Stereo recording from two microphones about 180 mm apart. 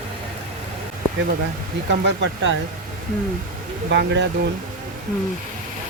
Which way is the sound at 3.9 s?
75° right (ahead or behind).